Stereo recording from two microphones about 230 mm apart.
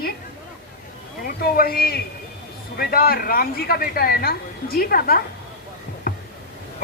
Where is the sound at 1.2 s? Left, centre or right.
Left.